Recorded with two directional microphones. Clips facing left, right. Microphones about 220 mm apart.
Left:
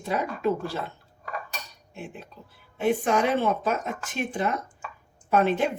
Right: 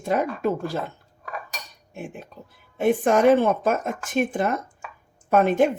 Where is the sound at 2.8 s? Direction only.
50° right (ahead or behind).